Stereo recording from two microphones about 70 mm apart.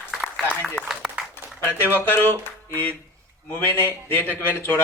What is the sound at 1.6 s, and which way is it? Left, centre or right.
A man's voice, left.